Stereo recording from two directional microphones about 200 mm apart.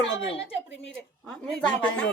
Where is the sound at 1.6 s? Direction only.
5° left (ahead or behind).